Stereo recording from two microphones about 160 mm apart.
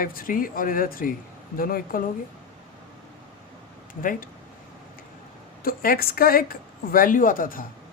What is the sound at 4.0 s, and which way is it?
Speech, 60° left (ahead or behind).